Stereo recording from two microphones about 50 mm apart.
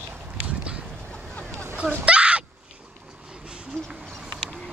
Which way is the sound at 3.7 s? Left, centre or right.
Centre.